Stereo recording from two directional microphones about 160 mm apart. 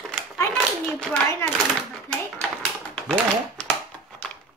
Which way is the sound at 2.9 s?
5° left (ahead or behind).